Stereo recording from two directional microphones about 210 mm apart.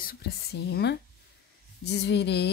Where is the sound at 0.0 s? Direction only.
45° left (ahead or behind).